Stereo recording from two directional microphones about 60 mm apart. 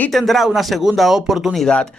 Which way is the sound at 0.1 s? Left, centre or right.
Centre.